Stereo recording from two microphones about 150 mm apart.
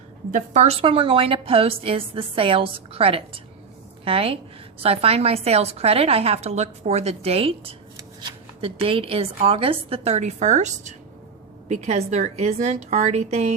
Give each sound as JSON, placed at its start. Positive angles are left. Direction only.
{"t": 0.3, "sound": "a woman's voice", "side_deg": -55}